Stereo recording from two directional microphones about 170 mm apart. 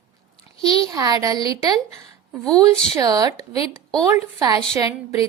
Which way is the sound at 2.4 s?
5° left (ahead or behind).